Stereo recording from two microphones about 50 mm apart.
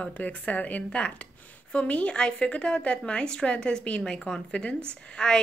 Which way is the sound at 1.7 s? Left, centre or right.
Left.